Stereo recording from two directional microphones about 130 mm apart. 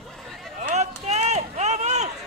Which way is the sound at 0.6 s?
60° right (ahead or behind).